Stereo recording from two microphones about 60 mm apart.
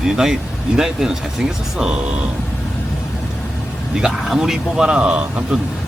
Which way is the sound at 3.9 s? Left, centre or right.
Centre.